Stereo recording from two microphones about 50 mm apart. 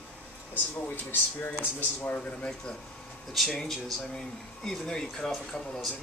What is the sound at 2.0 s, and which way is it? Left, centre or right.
Speech, left.